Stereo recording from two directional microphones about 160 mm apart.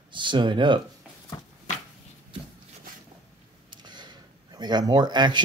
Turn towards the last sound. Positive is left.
turn(degrees=-30)  # may be behind; listen again after turning